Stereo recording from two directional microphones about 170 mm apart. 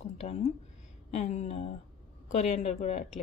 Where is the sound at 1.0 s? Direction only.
40° left (ahead or behind).